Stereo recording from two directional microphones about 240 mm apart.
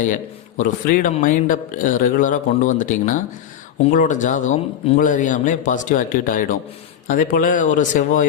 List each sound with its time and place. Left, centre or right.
0.0 s speech: left